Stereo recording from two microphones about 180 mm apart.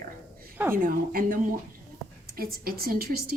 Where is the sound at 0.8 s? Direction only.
50° right (ahead or behind).